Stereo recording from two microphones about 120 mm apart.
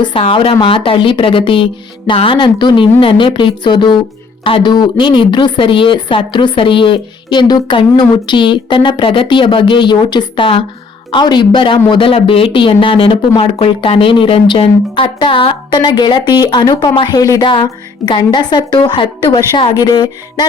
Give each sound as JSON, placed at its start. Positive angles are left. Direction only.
{"t": 0.2, "sound": "a woman's voice", "side_deg": 50}